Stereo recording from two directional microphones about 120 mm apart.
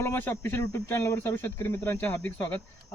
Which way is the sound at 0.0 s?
20° left (ahead or behind).